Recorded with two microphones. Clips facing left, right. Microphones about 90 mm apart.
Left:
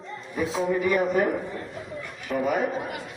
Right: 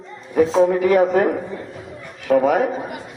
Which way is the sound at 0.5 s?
90° right.